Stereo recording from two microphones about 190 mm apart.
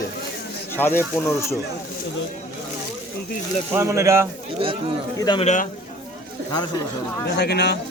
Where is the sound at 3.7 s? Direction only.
15° right (ahead or behind).